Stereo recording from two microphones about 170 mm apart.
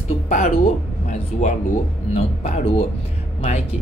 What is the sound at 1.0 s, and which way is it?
Speech, 45° left (ahead or behind).